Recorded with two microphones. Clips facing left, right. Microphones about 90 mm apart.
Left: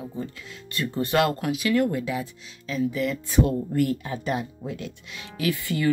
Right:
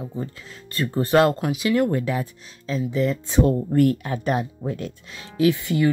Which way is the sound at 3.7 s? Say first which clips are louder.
Right 5 dB; 50° right (ahead or behind).